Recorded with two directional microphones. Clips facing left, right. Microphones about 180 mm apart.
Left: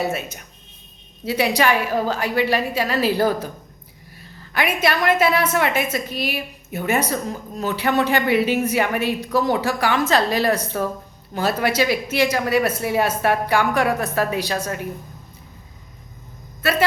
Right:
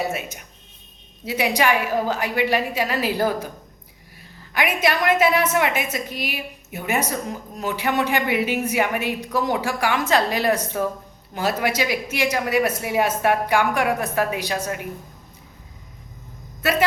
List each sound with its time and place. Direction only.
0.0 s a woman's voice: 15° right (ahead or behind)
4.5 s a woman's voice: 15° right (ahead or behind)